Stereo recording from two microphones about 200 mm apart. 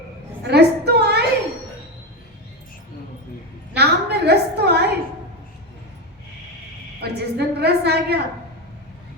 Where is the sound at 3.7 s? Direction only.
55° right (ahead or behind).